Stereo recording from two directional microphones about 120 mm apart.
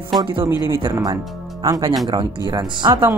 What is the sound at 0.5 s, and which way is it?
Speech, 35° left (ahead or behind).